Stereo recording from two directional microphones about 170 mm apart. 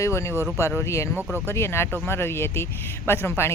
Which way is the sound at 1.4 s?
15° left (ahead or behind).